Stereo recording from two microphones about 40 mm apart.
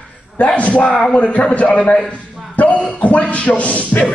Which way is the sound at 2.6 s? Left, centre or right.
Left.